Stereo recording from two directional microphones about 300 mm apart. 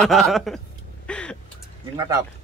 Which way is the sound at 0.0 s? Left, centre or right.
Centre.